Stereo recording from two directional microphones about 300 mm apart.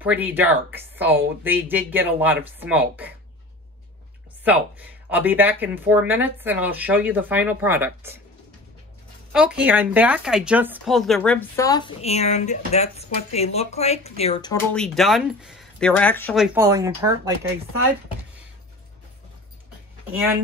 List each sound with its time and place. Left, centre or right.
0.0 s speech: centre
4.5 s speech: centre
9.3 s speech: centre
14.7 s speech: centre
16.5 s speech: centre